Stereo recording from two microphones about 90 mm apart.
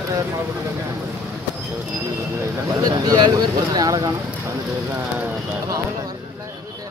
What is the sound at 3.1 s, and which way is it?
Speech, 50° right (ahead or behind).